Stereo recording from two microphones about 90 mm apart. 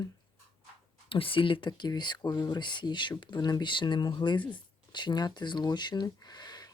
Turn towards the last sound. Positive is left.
turn(degrees=50)  # may be behind; listen again after turning